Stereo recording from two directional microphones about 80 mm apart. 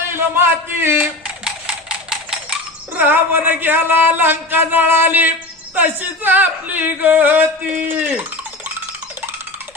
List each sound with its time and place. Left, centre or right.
0.3 s speech: right
1.2 s typewriter: centre
3.0 s speech: right